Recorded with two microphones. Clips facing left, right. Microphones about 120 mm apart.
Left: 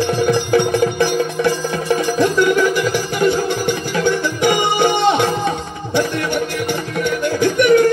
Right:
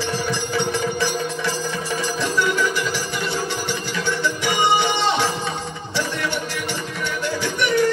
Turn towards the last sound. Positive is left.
turn(degrees=50)  # may be behind; listen again after turning